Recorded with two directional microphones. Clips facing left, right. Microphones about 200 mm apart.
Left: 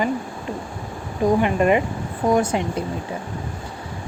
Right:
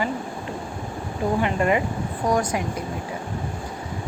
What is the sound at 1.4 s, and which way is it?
A woman's voice, 20° left (ahead or behind).